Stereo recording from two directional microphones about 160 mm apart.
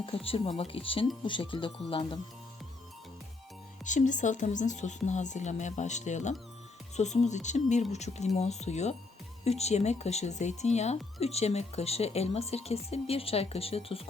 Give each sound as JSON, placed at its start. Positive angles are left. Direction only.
{"t": 0.0, "sound": "speech", "side_deg": 35}
{"t": 3.8, "sound": "speech", "side_deg": 50}